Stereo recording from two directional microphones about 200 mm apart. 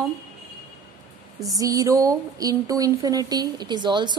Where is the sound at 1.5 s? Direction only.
15° right (ahead or behind).